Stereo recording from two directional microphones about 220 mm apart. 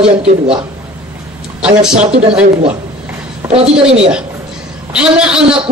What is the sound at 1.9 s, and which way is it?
Speech, 30° right (ahead or behind).